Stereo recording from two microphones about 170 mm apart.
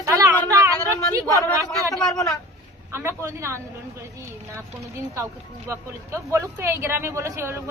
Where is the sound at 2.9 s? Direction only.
15° right (ahead or behind).